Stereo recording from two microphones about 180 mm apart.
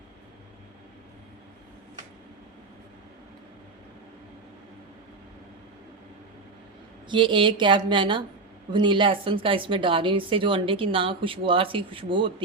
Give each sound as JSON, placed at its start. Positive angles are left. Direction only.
{"t": 7.1, "sound": "speech", "side_deg": -25}